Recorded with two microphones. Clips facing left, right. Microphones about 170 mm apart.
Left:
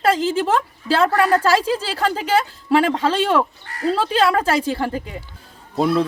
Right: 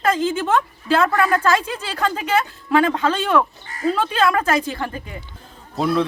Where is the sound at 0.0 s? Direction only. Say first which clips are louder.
Left 2 dB; 30° left (ahead or behind).